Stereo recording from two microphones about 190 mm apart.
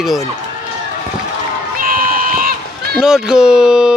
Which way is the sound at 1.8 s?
45° right (ahead or behind).